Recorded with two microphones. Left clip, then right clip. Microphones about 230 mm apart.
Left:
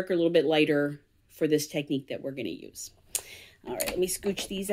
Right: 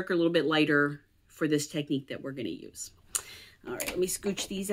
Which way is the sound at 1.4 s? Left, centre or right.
Centre.